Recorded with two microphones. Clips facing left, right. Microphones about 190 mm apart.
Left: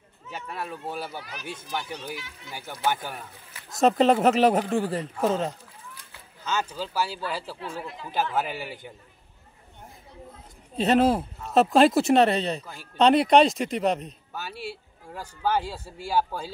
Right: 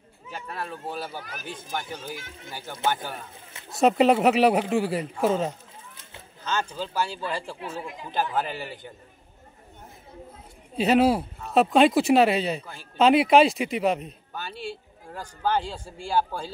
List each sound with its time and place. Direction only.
0.3 s speech: 10° left (ahead or behind)
1.2 s speech: 50° right (ahead or behind)
3.8 s a man's voice: 5° right (ahead or behind)
6.4 s speech: 10° left (ahead or behind)
7.7 s a man's voice: 15° right (ahead or behind)
8.4 s speech: 10° left (ahead or behind)
10.8 s speech: centre (ahead or behind)